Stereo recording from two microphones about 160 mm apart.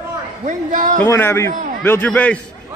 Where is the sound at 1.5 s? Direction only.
55° right (ahead or behind).